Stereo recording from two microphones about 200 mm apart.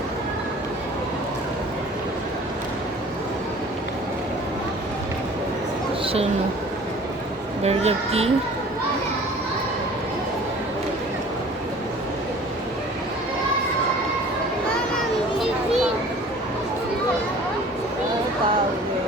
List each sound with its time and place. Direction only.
7.6 s speech: 30° right (ahead or behind)